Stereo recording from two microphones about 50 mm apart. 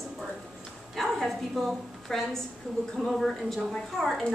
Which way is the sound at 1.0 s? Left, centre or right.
Centre.